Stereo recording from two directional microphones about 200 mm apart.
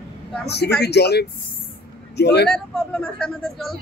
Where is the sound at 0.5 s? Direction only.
55° left (ahead or behind).